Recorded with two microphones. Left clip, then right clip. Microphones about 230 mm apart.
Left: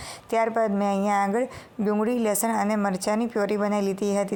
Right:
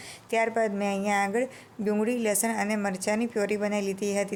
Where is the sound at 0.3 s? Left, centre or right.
Centre.